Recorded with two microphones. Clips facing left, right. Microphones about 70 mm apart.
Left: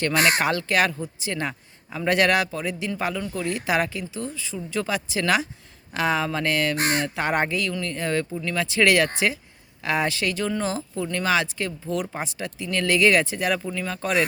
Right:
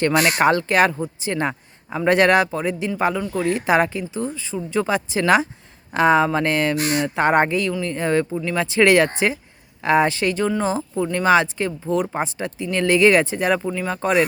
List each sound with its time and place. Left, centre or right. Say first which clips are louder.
0.3 s speech: right 6 dB; right
6.7 s speech: right 2 dB; left
7.2 s speech: right 6 dB; right
7.7 s speech: right 5 dB; centre